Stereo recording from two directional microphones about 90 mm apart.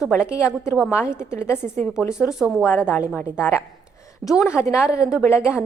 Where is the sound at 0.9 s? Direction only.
30° left (ahead or behind).